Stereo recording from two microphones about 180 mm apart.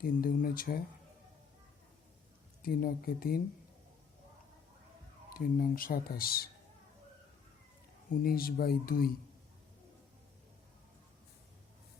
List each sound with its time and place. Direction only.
0.0 s speech: 55° left (ahead or behind)
2.6 s speech: 55° left (ahead or behind)
5.3 s speech: 55° left (ahead or behind)
8.1 s speech: 55° left (ahead or behind)